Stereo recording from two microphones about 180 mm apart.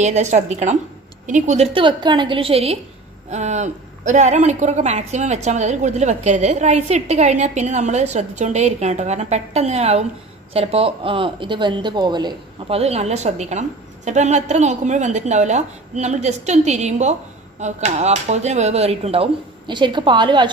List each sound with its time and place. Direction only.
0.0 s a woman's voice: 40° right (ahead or behind)